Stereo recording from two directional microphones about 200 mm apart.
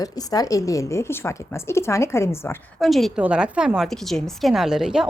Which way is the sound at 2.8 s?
Centre (ahead or behind).